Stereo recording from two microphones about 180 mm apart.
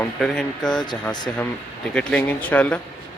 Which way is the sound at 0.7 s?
25° left (ahead or behind).